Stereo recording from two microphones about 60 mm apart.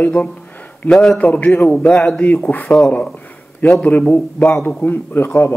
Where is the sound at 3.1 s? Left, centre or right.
Left.